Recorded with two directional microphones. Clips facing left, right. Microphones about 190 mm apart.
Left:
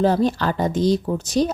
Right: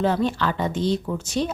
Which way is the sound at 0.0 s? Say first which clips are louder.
Left 3 dB; 40° left (ahead or behind).